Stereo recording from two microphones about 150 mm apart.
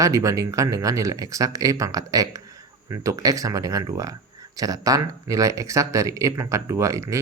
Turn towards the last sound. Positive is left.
turn(degrees=-20)  # may be behind; listen again after turning